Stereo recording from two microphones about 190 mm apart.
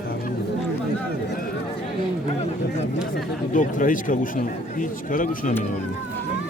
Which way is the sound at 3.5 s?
45° left (ahead or behind).